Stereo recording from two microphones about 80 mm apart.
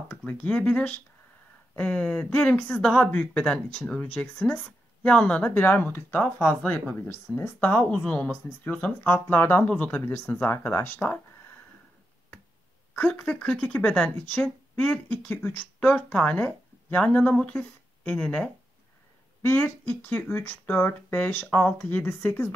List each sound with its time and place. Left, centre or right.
0.3 s speech: centre
8.0 s speech: centre
8.3 s speech: left
12.9 s speech: centre
19.4 s speech: left